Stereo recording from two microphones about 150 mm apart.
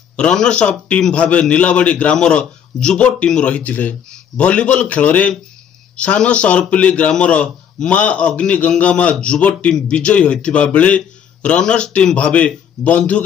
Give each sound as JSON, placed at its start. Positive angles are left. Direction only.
{"t": 0.1, "sound": "a man's voice", "side_deg": 5}